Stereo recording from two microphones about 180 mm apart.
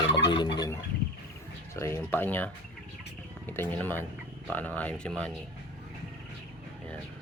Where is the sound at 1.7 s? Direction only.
15° left (ahead or behind).